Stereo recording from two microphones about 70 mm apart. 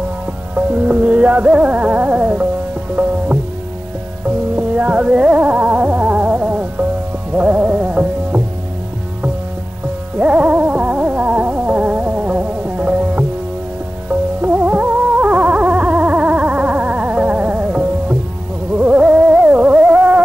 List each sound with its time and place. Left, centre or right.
0.6 s music: centre
4.6 s music: right
10.1 s music: centre
14.4 s music: right